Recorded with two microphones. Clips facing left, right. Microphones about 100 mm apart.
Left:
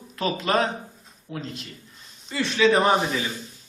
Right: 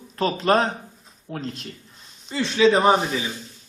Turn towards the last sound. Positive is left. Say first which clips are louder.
# right 2 dB
turn(degrees=-15)  # may be behind; listen again after turning